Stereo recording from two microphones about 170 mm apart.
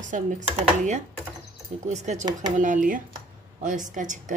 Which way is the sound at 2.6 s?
50° right (ahead or behind).